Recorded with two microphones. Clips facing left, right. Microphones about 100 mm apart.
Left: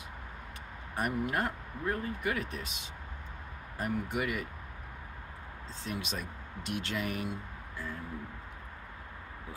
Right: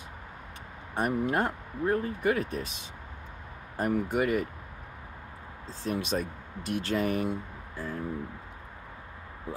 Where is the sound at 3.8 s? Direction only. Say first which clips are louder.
Right 6 dB; 40° right (ahead or behind).